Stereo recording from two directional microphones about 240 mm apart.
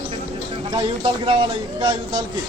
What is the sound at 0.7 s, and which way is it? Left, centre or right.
A man's voice, centre.